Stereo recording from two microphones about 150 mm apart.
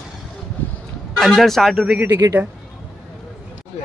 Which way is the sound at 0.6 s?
10° left (ahead or behind).